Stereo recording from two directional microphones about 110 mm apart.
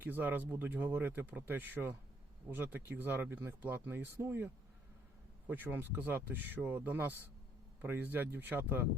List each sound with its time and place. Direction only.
0.0 s speech: 15° right (ahead or behind)